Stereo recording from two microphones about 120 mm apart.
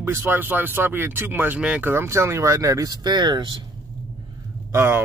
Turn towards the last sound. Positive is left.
turn(degrees=-20)  # may be behind; listen again after turning